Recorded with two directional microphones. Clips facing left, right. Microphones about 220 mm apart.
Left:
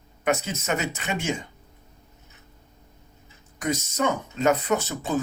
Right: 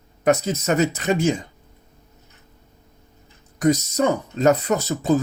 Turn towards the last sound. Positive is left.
turn(degrees=-35)  # may be behind; listen again after turning